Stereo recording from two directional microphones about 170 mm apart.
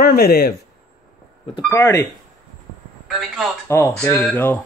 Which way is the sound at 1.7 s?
15° left (ahead or behind).